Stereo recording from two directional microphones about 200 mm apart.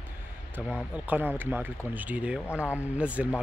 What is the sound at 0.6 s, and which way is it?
Speech, 5° right (ahead or behind).